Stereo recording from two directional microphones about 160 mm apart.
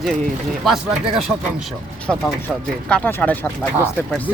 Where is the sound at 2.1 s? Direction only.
Centre (ahead or behind).